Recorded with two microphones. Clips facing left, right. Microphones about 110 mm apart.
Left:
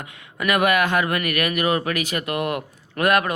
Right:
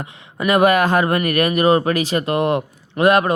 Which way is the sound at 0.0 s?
30° right (ahead or behind).